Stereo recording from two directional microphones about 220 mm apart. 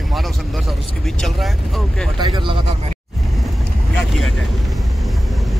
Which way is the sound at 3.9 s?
Centre (ahead or behind).